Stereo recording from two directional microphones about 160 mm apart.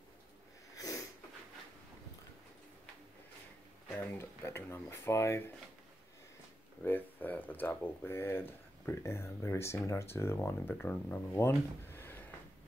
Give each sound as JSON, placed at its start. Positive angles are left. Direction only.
{"t": 0.7, "sound": "sniff", "side_deg": 20}
{"t": 3.9, "sound": "speech", "side_deg": 10}
{"t": 6.8, "sound": "speech", "side_deg": 10}